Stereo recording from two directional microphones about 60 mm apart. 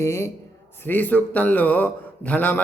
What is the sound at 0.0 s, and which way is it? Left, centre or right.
Speech, left.